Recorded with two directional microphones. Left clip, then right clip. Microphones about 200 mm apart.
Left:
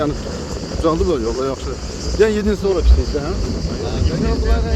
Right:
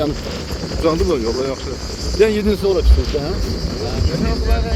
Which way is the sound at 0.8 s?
15° left (ahead or behind).